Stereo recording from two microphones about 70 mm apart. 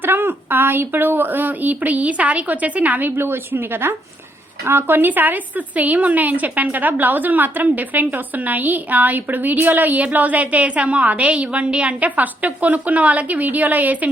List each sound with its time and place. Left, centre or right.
0.0 s a woman's voice: right